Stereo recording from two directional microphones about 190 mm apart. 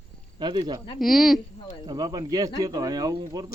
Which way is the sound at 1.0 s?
Centre (ahead or behind).